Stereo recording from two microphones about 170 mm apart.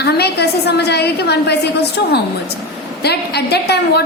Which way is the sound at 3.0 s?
75° left (ahead or behind).